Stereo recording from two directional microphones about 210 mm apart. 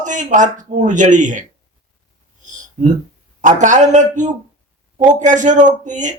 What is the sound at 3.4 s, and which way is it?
Speech, 35° right (ahead or behind).